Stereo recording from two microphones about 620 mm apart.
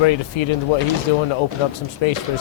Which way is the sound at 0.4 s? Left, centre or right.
Left.